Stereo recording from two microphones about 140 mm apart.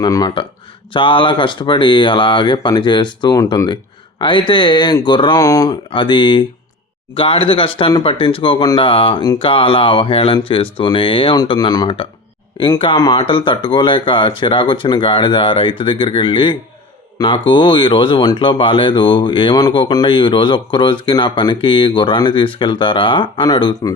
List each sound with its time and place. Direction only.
0.0 s speech: 30° left (ahead or behind)
5.9 s speech: 35° left (ahead or behind)